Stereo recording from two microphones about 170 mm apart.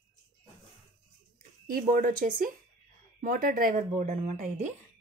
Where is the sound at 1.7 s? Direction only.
55° right (ahead or behind).